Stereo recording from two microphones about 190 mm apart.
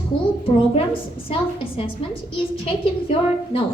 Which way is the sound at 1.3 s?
30° left (ahead or behind).